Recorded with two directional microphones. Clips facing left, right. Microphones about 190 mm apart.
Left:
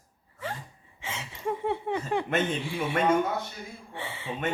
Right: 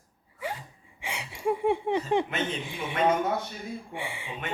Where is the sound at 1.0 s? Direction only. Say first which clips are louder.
Right 3 dB; 15° right (ahead or behind).